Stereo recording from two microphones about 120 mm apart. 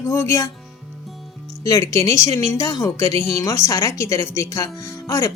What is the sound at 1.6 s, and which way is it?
Speech, 25° left (ahead or behind).